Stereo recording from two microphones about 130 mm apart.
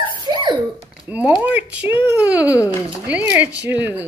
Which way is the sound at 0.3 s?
35° right (ahead or behind).